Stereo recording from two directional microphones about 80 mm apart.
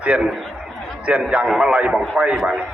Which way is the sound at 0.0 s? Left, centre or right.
Centre.